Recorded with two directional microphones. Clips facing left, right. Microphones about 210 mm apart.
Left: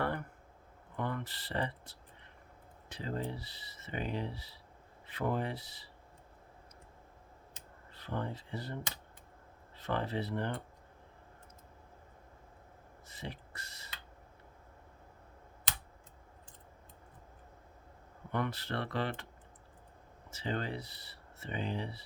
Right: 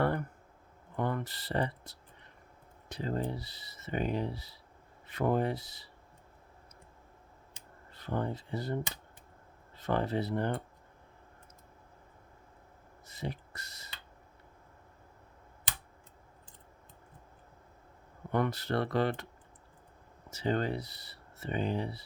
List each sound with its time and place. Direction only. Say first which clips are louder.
0.9 s speech: right 4 dB; 40° right (ahead or behind)
7.9 s speech: right 4 dB; 45° right (ahead or behind)
9.8 s speech: right 4 dB; 40° right (ahead or behind)
13.1 s speech: right 6 dB; 40° right (ahead or behind)
18.3 s speech: right 5 dB; 40° right (ahead or behind)
20.3 s speech: right 6 dB; 40° right (ahead or behind)